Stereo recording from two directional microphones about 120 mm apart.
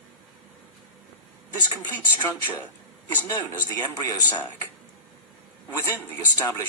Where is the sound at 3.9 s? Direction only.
30° left (ahead or behind).